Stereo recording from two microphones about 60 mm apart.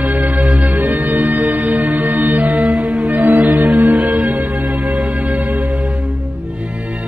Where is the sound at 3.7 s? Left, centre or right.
Right.